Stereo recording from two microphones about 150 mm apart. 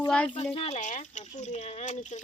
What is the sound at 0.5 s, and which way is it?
Speech, 45° left (ahead or behind).